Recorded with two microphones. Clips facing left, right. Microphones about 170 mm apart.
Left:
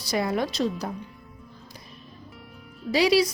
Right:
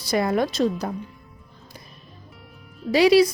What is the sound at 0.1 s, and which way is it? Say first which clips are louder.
Speech: right 4 dB; 50° right (ahead or behind).